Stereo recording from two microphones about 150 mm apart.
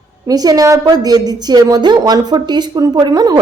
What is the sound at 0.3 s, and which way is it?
A woman's voice, 25° right (ahead or behind).